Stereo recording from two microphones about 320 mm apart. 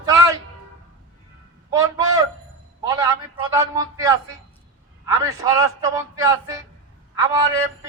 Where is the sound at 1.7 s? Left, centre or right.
Centre.